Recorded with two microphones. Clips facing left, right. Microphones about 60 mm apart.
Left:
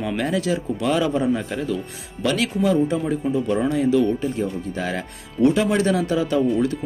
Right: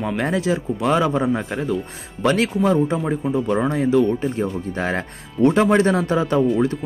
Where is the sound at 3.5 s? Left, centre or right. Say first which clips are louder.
Right 1 dB; right.